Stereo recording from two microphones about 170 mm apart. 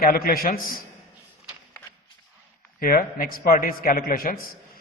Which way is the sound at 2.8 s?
60° left (ahead or behind).